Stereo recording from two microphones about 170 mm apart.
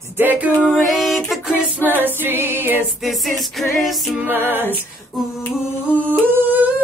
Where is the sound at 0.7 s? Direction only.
Centre (ahead or behind).